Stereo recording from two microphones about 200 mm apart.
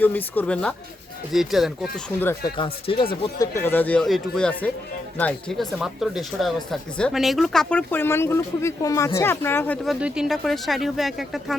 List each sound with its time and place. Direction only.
0.0 s speech: 10° left (ahead or behind)
2.2 s speech: 20° left (ahead or behind)
3.3 s speech: 15° left (ahead or behind)
9.8 s speech: centre (ahead or behind)